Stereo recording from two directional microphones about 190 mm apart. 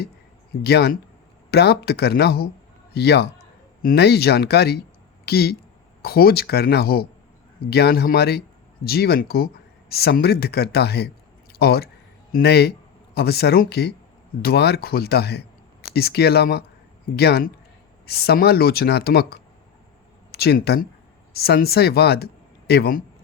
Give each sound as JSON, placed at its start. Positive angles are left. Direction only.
{"t": 0.6, "sound": "speech", "side_deg": 55}